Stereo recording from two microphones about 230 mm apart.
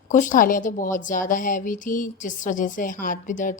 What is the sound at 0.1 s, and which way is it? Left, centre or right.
A woman's voice, left.